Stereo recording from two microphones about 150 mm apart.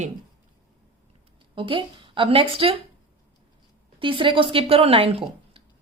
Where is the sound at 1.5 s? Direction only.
35° right (ahead or behind).